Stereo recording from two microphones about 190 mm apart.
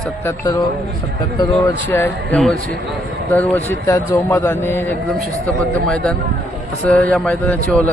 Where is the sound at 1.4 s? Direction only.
15° left (ahead or behind).